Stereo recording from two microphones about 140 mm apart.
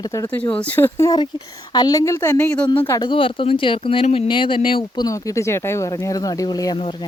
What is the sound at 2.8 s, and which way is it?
Speech, 20° left (ahead or behind).